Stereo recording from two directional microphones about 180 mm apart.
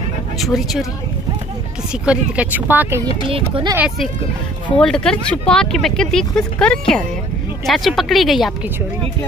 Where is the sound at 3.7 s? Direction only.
5° right (ahead or behind).